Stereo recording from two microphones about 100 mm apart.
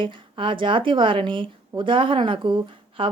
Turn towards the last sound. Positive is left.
turn(degrees=-55)  # may be behind; listen again after turning